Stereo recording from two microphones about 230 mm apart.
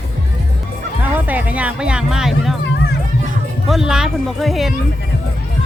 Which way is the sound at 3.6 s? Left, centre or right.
Centre.